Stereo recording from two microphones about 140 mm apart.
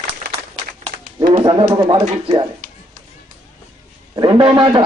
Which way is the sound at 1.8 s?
35° right (ahead or behind).